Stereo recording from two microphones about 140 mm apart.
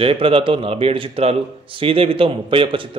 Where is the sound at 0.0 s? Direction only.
40° right (ahead or behind).